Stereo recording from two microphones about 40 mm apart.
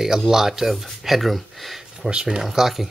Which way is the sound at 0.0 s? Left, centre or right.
Centre.